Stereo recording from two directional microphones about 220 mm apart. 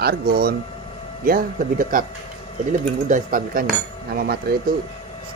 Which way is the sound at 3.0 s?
35° right (ahead or behind).